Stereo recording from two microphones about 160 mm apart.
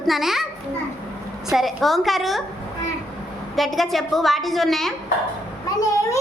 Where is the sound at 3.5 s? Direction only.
Centre (ahead or behind).